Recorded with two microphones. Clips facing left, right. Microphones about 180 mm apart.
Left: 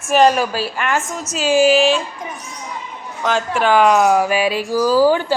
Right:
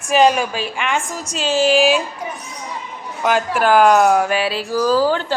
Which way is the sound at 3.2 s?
5° right (ahead or behind).